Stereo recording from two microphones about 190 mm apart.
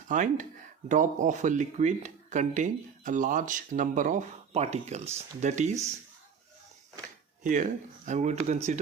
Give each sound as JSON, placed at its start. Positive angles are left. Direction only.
{"t": 0.1, "sound": "speech", "side_deg": -40}
{"t": 7.4, "sound": "speech", "side_deg": -45}